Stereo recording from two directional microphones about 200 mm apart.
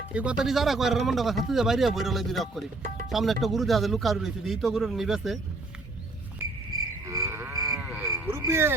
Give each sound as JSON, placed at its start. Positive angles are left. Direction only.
{"t": 0.1, "sound": "speech", "side_deg": -5}
{"t": 7.0, "sound": "cattle", "side_deg": -15}
{"t": 7.7, "sound": "a sound", "side_deg": -5}